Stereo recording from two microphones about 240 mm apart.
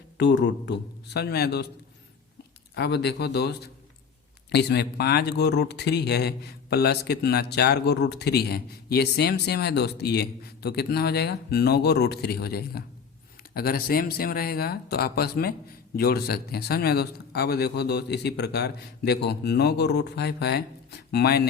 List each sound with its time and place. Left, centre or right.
0.2 s speech: left
2.7 s speech: left
4.5 s speech: left